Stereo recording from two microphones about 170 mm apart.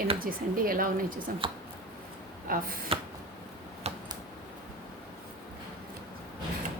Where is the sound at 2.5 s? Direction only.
60° right (ahead or behind).